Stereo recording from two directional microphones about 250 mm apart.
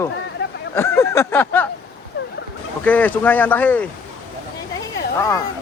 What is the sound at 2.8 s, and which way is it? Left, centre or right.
Speech, centre.